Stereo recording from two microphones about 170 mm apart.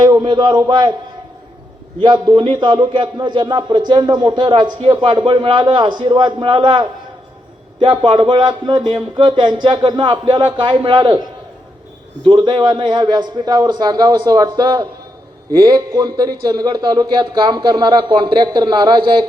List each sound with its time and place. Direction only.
0.0 s a man's voice: 25° right (ahead or behind)
2.0 s a man's voice: 25° right (ahead or behind)
12.3 s a man's voice: 30° right (ahead or behind)